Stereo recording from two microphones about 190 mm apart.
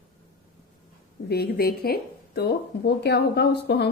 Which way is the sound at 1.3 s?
55° left (ahead or behind).